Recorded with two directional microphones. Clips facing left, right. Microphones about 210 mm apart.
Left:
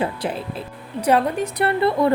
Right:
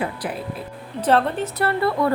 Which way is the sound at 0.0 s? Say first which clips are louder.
Left 3 dB; 25° left (ahead or behind).